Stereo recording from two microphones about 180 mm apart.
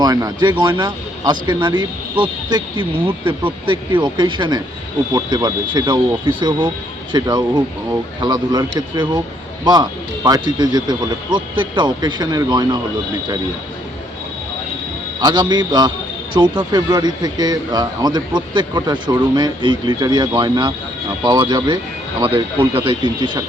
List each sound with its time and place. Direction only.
0.0 s a man's voice: 20° right (ahead or behind)
15.2 s a man's voice: 25° right (ahead or behind)